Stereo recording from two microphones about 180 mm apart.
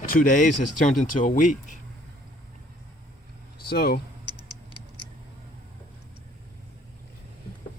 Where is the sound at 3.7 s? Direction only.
60° left (ahead or behind).